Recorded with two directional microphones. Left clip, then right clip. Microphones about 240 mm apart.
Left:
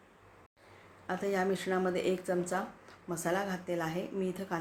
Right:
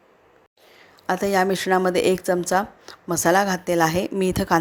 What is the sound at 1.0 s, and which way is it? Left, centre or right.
A woman's voice, right.